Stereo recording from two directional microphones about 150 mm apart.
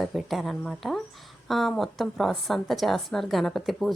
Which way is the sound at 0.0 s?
Centre (ahead or behind).